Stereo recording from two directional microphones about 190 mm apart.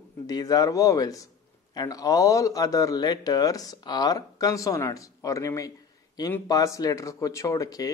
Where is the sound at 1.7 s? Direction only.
20° left (ahead or behind).